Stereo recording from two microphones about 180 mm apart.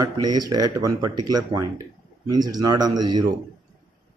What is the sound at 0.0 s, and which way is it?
Speech, 20° right (ahead or behind).